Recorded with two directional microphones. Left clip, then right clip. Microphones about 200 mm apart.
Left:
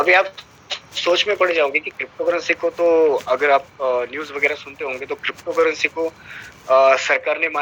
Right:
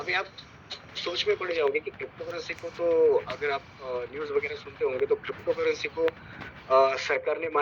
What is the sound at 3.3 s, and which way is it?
Speech, 45° left (ahead or behind).